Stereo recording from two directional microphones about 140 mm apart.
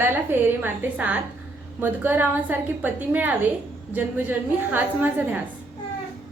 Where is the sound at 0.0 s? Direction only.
15° right (ahead or behind).